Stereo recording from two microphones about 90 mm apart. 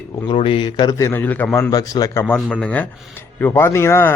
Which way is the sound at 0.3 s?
70° left (ahead or behind).